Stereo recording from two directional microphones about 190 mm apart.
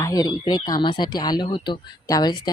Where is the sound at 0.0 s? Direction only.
20° left (ahead or behind).